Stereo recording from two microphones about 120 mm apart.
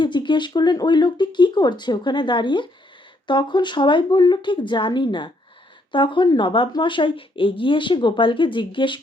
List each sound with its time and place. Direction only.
0.0 s speech: 40° left (ahead or behind)